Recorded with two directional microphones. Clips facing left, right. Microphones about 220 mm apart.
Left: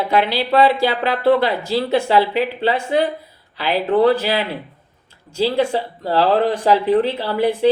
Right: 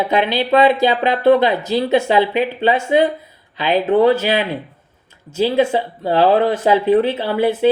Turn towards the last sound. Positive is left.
turn(degrees=-20)  # may be behind; listen again after turning